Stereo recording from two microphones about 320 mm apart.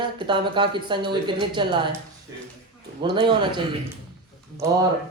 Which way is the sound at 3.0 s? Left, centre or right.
Centre.